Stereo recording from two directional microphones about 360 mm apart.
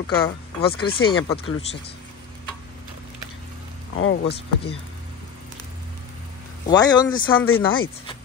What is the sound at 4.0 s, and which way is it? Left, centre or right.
Speech, left.